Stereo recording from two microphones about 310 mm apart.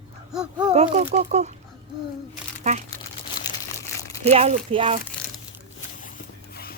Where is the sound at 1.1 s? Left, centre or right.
Right.